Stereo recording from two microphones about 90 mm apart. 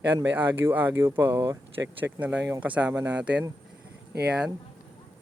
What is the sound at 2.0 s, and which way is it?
Speech, 20° right (ahead or behind).